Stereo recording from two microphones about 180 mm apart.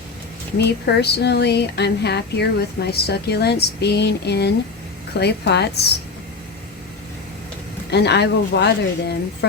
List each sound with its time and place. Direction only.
0.6 s speech: 65° left (ahead or behind)
7.9 s speech: 65° left (ahead or behind)